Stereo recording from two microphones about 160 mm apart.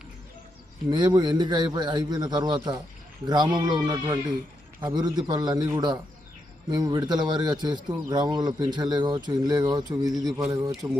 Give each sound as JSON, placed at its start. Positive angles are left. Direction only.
{"t": 0.9, "sound": "a man's voice", "side_deg": -25}